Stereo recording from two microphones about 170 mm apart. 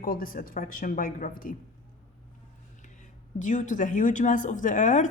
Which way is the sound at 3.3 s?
50° left (ahead or behind).